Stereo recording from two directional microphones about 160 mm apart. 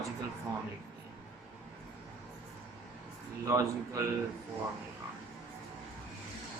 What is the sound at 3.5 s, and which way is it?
Speech, 20° right (ahead or behind).